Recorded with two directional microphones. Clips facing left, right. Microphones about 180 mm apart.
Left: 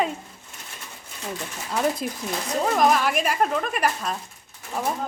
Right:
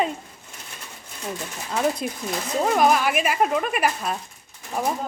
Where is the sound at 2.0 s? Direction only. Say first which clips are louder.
Right 1 dB; centre (ahead or behind).